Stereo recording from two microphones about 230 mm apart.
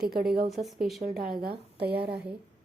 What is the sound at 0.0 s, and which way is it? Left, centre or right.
Speech, right.